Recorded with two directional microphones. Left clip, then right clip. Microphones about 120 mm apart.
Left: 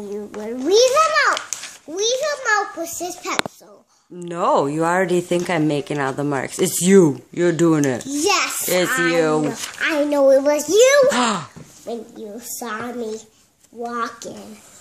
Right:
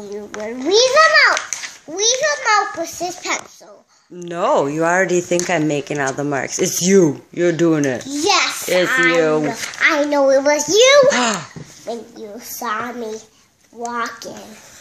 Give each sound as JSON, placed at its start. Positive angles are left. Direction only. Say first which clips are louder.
{"t": 0.3, "sound": "a child's voice", "louder": "right 1 dB", "side_deg": 25}
{"t": 8.2, "sound": "a child's voice", "louder": "right 3 dB", "side_deg": 35}
{"t": 9.5, "sound": "a child's voice", "louder": "right 6 dB", "side_deg": 25}